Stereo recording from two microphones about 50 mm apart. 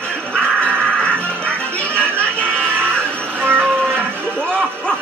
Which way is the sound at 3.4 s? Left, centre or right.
Right.